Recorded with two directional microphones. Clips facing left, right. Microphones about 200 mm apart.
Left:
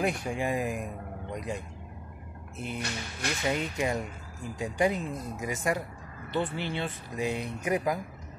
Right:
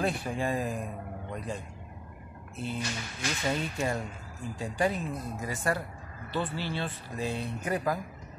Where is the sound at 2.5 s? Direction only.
20° left (ahead or behind).